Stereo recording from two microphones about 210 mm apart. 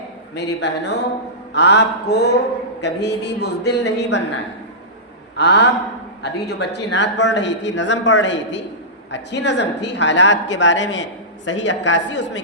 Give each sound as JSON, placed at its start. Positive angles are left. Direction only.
{"t": 0.3, "sound": "a man's voice", "side_deg": 55}
{"t": 1.5, "sound": "mantra", "side_deg": 55}
{"t": 2.8, "sound": "a man's voice", "side_deg": 55}
{"t": 5.4, "sound": "a man's voice", "side_deg": 55}